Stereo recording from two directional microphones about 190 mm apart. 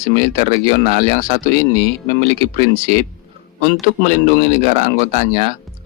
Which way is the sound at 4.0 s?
35° right (ahead or behind).